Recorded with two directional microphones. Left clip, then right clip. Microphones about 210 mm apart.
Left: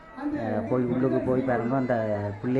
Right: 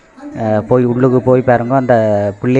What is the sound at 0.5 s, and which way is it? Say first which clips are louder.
A man's voice: right 16 dB; 40° right (ahead or behind).